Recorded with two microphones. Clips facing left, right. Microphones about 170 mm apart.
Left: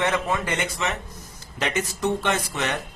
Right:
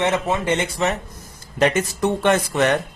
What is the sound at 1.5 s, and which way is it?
Speech, 50° right (ahead or behind).